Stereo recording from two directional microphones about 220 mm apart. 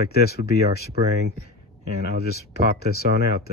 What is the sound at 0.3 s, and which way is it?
Speech, 45° left (ahead or behind).